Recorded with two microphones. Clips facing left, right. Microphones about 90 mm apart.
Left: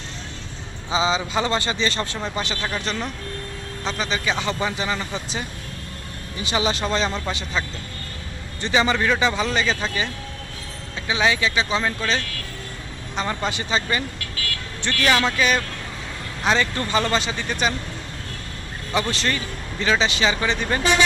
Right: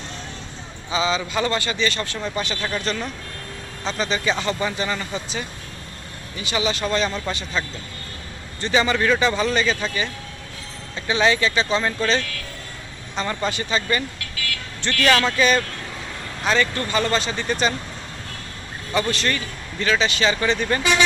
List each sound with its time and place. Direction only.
0.9 s speech: 25° left (ahead or behind)
2.6 s speech: 10° left (ahead or behind)
6.4 s speech: 35° left (ahead or behind)
8.6 s speech: 15° left (ahead or behind)
11.1 s speech: 10° left (ahead or behind)
16.4 s speech: 20° left (ahead or behind)
18.9 s speech: 20° left (ahead or behind)